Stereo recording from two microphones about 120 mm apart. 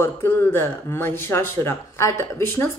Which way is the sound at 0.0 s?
20° left (ahead or behind).